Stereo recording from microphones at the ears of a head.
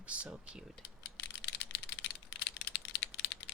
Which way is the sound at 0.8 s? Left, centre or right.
Left.